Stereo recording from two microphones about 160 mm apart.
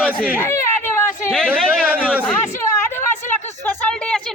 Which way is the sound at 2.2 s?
15° left (ahead or behind).